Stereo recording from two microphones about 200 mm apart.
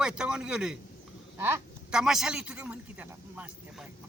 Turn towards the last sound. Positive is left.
turn(degrees=-5)  # may be behind; listen again after turning